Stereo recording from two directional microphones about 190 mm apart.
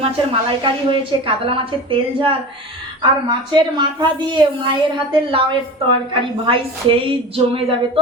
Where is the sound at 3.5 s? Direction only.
25° right (ahead or behind).